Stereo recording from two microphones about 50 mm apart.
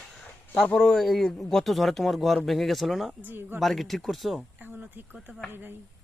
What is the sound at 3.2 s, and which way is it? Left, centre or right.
Speech, right.